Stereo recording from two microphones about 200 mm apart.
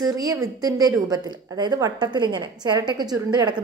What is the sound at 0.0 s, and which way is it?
A woman's voice, 20° right (ahead or behind).